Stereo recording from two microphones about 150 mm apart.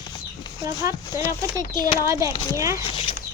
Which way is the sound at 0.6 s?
20° right (ahead or behind).